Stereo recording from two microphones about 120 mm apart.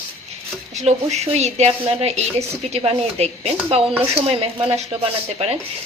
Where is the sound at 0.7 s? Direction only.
65° right (ahead or behind).